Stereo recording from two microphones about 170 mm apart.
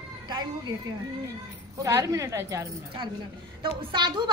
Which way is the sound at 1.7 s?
20° right (ahead or behind).